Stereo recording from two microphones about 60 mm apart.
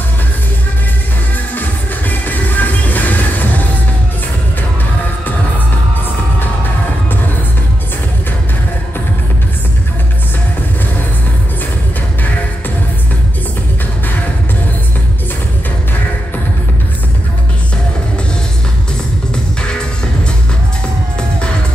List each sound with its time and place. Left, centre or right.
1.5 s music: left